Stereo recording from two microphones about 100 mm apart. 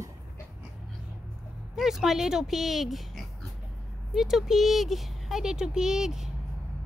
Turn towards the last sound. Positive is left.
turn(degrees=-5)  # may be behind; listen again after turning